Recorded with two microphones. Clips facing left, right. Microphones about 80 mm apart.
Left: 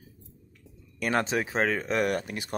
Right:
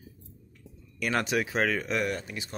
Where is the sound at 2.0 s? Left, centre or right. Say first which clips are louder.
Left 4 dB; left.